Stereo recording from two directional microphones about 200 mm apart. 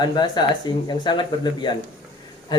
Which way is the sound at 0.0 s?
20° left (ahead or behind).